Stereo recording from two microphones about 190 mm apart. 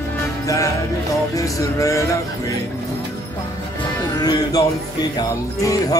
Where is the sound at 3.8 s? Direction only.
20° left (ahead or behind).